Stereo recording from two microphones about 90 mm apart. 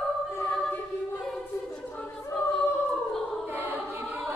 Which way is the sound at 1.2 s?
5° left (ahead or behind).